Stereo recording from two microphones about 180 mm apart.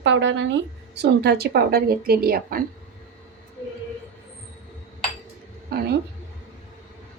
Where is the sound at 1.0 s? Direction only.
65° right (ahead or behind).